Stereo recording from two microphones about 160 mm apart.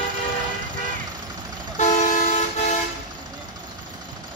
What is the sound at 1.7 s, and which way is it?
Toot, 50° left (ahead or behind).